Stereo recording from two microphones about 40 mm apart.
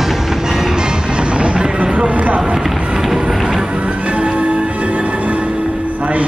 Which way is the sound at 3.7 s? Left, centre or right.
Right.